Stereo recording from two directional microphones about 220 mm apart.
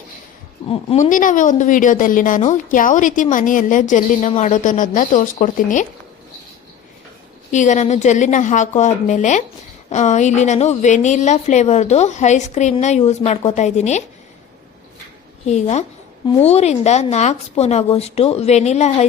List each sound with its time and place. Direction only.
0.7 s a woman's voice: 25° left (ahead or behind)
7.5 s a woman's voice: 35° left (ahead or behind)
15.4 s a woman's voice: 30° left (ahead or behind)